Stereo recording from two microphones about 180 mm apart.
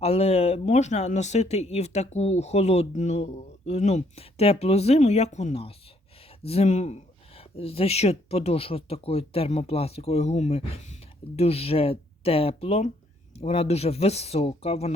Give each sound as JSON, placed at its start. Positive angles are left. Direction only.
{"t": 0.0, "sound": "speech", "side_deg": 35}